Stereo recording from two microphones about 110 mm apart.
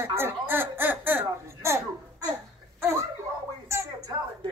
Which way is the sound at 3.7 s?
25° right (ahead or behind).